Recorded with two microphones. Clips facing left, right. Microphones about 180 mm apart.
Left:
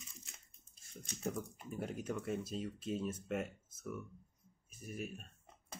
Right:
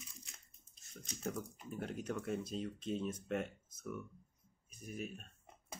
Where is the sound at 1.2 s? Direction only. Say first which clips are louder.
Left 1 dB; 5° left (ahead or behind).